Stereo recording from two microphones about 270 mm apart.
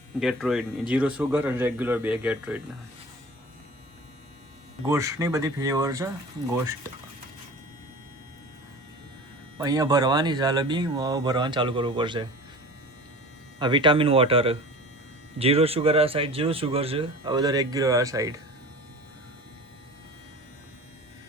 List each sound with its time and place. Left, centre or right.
0.2 s speech: centre
4.9 s speech: centre
9.6 s speech: centre
13.6 s speech: centre